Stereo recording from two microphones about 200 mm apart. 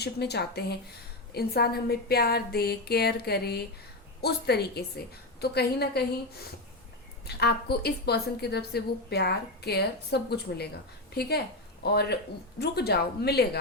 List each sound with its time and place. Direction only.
0.0 s a woman's voice: 55° left (ahead or behind)
7.3 s a woman's voice: 55° left (ahead or behind)